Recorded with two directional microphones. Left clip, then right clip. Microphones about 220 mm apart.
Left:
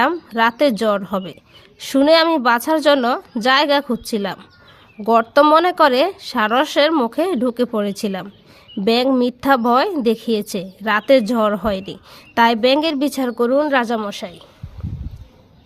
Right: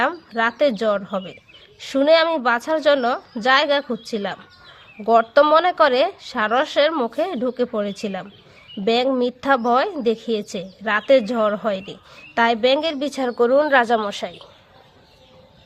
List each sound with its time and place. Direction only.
0.0 s a woman's voice: 35° left (ahead or behind)